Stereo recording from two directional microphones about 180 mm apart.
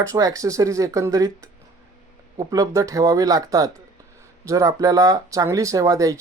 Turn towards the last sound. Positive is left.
turn(degrees=-20)  # may be behind; listen again after turning